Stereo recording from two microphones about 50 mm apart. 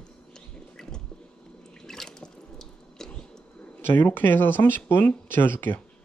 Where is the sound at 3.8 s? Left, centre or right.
Left.